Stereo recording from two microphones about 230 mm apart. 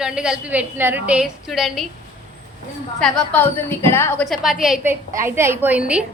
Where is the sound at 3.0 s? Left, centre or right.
Centre.